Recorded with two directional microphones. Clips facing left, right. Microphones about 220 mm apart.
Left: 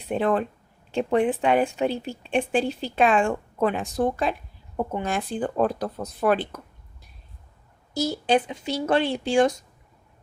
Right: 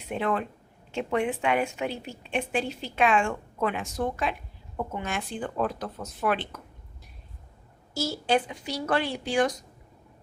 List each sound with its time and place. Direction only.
0.1 s a woman's voice: 35° left (ahead or behind)
7.9 s speech: 20° left (ahead or behind)